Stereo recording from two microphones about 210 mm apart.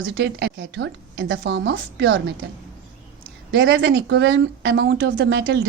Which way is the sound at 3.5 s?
55° right (ahead or behind).